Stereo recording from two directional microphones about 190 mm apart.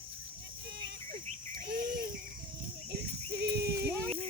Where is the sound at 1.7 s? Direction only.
50° right (ahead or behind).